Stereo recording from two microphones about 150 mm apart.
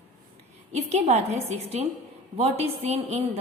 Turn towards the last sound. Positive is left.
turn(degrees=-45)  # may be behind; listen again after turning